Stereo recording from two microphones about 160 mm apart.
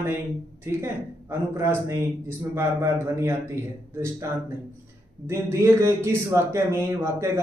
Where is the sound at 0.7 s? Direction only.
15° right (ahead or behind).